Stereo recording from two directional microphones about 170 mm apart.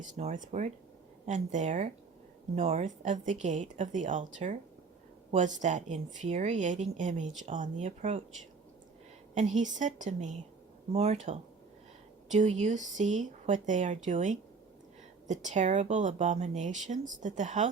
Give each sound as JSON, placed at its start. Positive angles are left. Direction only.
{"t": 0.0, "sound": "speech", "side_deg": -45}
{"t": 9.3, "sound": "speech", "side_deg": -45}